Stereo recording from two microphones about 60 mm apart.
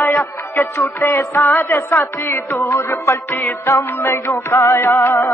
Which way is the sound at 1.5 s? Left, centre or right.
Left.